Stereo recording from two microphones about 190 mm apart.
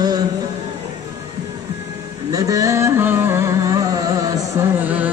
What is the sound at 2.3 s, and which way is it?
Carnatic music, 20° right (ahead or behind).